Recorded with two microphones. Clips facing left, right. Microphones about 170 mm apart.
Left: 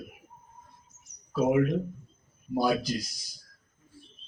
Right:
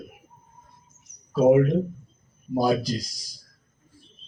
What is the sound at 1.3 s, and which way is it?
Speech, 35° right (ahead or behind).